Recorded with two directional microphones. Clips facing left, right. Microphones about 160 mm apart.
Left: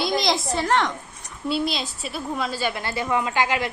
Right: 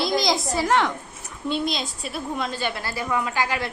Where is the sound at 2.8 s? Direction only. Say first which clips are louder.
Left 2 dB; 25° left (ahead or behind).